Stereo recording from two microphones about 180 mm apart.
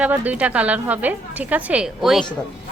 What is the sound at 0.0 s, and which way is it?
A woman's voice, 10° right (ahead or behind).